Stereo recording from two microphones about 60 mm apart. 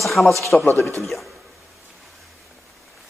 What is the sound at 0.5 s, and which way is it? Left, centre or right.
Speech, centre.